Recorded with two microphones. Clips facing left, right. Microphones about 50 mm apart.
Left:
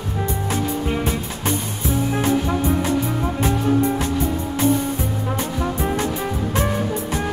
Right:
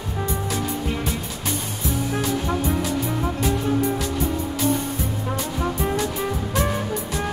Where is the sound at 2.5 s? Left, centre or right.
Centre.